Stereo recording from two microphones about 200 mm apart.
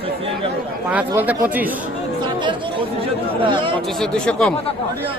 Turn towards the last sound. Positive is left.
turn(degrees=5)  # may be behind; listen again after turning